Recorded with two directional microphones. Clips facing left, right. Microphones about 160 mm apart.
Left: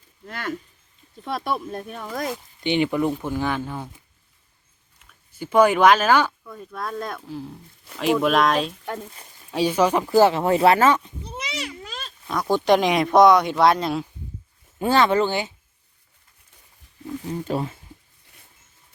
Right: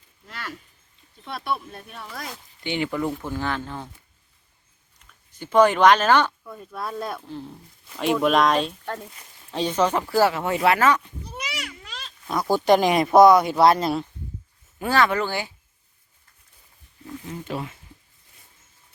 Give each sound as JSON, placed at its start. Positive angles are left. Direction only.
{"t": 0.3, "sound": "speech", "side_deg": 50}
{"t": 2.3, "sound": "speech", "side_deg": 20}
{"t": 5.3, "sound": "speech", "side_deg": 10}
{"t": 6.4, "sound": "speech", "side_deg": -5}
{"t": 10.3, "sound": "a child's voice", "side_deg": 35}
{"t": 12.3, "sound": "speech", "side_deg": -5}
{"t": 14.8, "sound": "speech", "side_deg": 25}
{"t": 17.2, "sound": "speech", "side_deg": 35}